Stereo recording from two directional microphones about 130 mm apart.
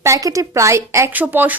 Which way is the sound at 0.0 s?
25° right (ahead or behind).